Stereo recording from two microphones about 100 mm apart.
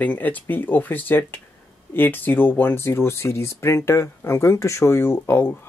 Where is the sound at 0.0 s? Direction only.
15° left (ahead or behind).